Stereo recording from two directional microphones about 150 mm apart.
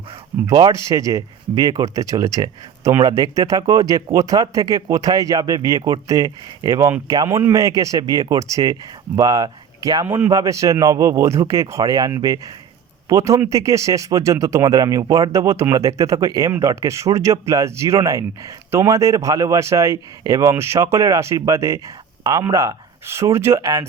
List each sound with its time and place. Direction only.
0.4 s speech: 25° right (ahead or behind)